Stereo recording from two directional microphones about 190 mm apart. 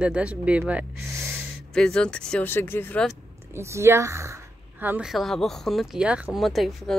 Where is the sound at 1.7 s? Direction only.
5° left (ahead or behind).